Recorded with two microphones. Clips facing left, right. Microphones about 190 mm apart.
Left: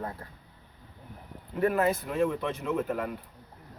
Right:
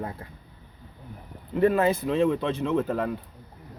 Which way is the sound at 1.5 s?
25° right (ahead or behind).